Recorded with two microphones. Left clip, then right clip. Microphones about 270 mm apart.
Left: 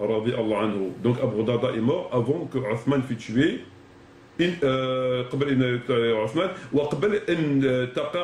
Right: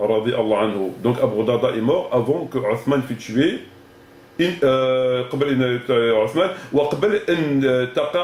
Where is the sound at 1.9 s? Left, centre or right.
Right.